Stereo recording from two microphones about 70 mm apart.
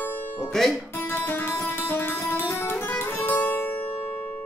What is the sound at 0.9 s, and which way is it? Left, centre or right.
Music, left.